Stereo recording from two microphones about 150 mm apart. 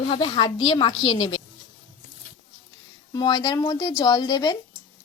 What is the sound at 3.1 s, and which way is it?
Speech, 30° left (ahead or behind).